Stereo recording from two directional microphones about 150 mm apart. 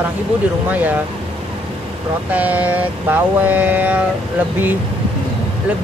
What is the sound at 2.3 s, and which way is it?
Music, 10° right (ahead or behind).